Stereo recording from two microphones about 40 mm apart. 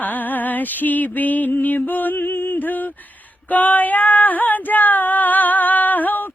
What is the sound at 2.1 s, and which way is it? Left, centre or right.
Music, left.